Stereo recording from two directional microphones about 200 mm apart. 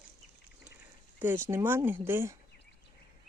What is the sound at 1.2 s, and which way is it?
Speech, 10° right (ahead or behind).